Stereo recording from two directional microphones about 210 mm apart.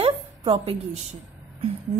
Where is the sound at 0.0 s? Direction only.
25° right (ahead or behind).